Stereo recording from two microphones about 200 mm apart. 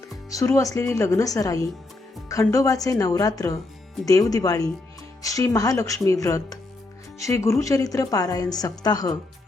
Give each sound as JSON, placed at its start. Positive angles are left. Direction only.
{"t": 0.3, "sound": "a woman's voice", "side_deg": 15}